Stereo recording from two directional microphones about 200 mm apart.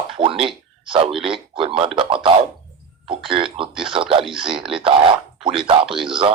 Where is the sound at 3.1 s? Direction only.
25° right (ahead or behind).